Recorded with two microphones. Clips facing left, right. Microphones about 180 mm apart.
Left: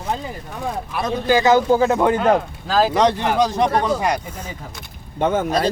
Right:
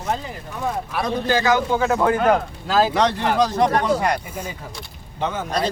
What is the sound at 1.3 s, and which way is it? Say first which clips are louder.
Speech: left 6 dB; 15° left (ahead or behind).